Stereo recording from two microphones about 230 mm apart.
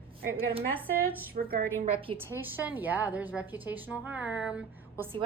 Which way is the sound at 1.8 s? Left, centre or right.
Right.